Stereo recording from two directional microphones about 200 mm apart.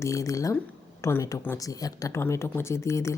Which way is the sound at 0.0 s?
15° left (ahead or behind).